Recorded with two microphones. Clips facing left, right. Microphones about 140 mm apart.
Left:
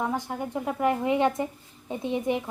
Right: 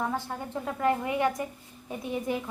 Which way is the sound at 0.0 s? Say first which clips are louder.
Left 3 dB; 15° left (ahead or behind).